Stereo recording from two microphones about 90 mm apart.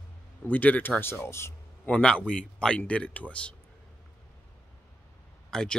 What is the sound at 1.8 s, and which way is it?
Speech, 15° left (ahead or behind).